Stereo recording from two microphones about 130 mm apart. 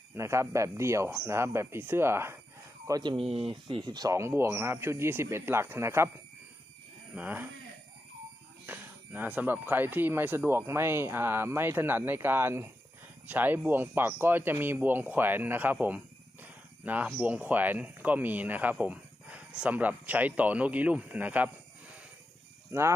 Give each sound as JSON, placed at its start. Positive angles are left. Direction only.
{"t": 0.1, "sound": "speech", "side_deg": -20}
{"t": 2.8, "sound": "speech", "side_deg": -30}
{"t": 3.5, "sound": "speech", "side_deg": -35}
{"t": 7.2, "sound": "speech", "side_deg": -10}
{"t": 8.6, "sound": "speech", "side_deg": -15}
{"t": 22.7, "sound": "speech", "side_deg": -20}